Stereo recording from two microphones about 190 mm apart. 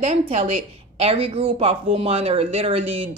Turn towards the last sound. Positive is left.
turn(degrees=-30)  # may be behind; listen again after turning